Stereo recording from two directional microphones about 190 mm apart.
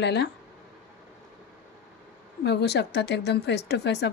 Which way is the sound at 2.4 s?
60° left (ahead or behind).